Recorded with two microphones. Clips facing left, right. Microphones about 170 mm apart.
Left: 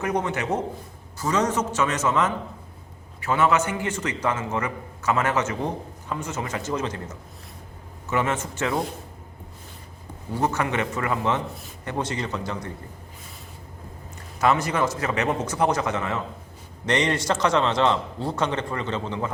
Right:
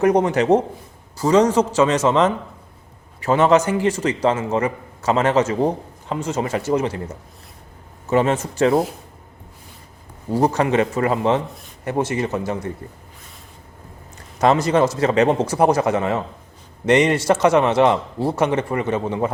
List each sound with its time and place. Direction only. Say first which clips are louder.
0.0 s a man's voice: right 9 dB; 35° right (ahead or behind)
6.6 s speech: right 8 dB; 10° right (ahead or behind)
8.1 s a man's voice: right 7 dB; 30° right (ahead or behind)
10.3 s a man's voice: right 7 dB; 35° right (ahead or behind)
14.4 s a man's voice: right 6 dB; 30° right (ahead or behind)